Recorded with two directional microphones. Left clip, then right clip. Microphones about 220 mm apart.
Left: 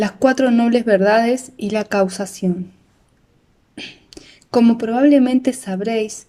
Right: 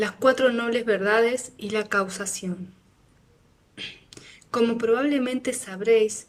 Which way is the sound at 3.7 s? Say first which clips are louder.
Left 4 dB; 20° left (ahead or behind).